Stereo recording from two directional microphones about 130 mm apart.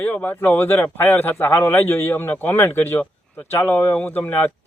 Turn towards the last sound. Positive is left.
turn(degrees=15)  # may be behind; listen again after turning